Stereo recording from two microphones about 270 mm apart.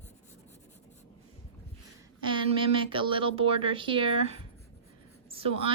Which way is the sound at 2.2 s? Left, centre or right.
Centre.